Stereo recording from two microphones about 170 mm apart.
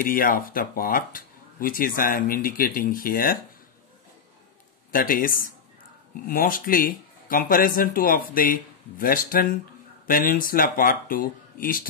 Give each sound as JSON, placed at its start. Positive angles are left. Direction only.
{"t": 0.0, "sound": "speech", "side_deg": 55}
{"t": 4.9, "sound": "speech", "side_deg": 55}